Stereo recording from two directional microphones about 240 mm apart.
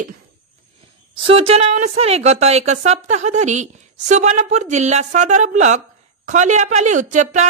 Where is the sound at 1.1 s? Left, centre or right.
Right.